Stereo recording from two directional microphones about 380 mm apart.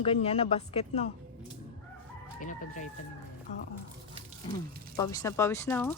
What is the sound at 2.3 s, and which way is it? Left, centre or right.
Speech, centre.